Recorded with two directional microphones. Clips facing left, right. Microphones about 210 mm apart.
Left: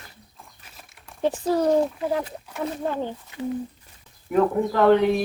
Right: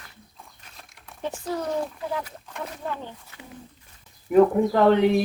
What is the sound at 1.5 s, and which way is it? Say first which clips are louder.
Speech: left 7 dB; 35° left (ahead or behind).